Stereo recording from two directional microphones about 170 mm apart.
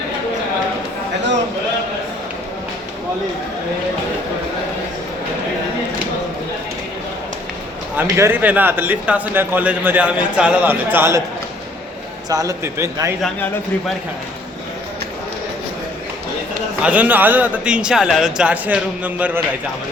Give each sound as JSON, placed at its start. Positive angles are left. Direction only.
{"t": 8.0, "sound": "a man's voice", "side_deg": -15}
{"t": 12.3, "sound": "a man's voice", "side_deg": -20}
{"t": 16.8, "sound": "a man's voice", "side_deg": -10}